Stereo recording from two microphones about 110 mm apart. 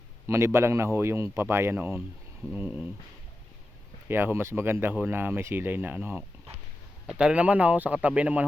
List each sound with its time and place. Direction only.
0.3 s speech: 25° right (ahead or behind)
4.1 s speech: 20° right (ahead or behind)